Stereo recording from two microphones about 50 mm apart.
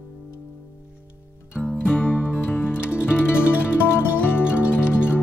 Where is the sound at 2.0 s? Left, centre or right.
Left.